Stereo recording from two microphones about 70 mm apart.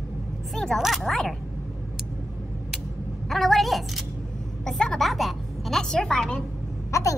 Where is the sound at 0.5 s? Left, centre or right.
Centre.